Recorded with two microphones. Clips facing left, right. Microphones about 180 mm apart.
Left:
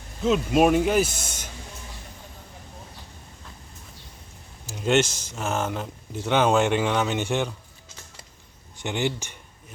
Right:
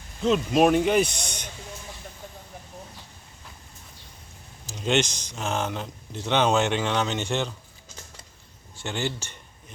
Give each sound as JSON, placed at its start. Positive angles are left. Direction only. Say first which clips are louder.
{"t": 0.2, "sound": "speech", "louder": "even", "side_deg": 5}
{"t": 4.6, "sound": "speech", "louder": "left 3 dB", "side_deg": 5}
{"t": 8.7, "sound": "a sound", "louder": "left 3 dB", "side_deg": 15}